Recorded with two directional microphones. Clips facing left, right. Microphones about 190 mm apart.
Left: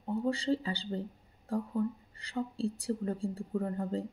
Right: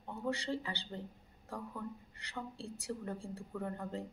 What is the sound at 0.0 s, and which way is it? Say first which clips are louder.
Speech: left 7 dB; 30° left (ahead or behind).